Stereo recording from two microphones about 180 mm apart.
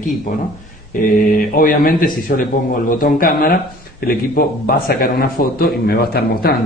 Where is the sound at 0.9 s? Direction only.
50° left (ahead or behind).